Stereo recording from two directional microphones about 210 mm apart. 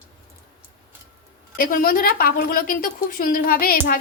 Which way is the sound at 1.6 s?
40° left (ahead or behind).